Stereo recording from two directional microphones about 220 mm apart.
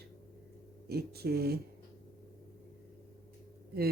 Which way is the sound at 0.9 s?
45° right (ahead or behind).